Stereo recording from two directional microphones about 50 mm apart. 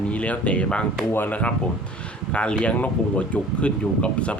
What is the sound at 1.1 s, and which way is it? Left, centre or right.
Speech, left.